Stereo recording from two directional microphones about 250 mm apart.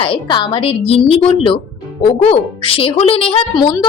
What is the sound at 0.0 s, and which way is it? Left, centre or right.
A woman's voice, centre.